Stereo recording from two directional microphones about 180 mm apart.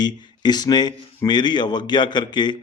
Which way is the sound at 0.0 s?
25° left (ahead or behind).